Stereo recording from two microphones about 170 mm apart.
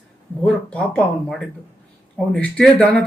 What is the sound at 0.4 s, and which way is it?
Speech, 5° left (ahead or behind).